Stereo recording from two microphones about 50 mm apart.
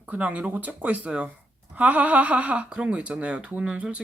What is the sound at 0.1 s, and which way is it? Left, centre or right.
Speech, right.